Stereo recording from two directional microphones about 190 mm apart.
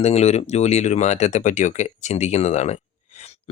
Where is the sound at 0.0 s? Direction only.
35° left (ahead or behind).